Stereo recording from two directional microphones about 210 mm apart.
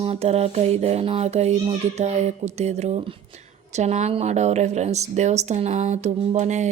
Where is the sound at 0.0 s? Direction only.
30° right (ahead or behind).